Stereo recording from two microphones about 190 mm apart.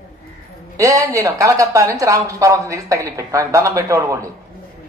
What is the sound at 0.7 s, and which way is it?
A man's voice, 15° right (ahead or behind).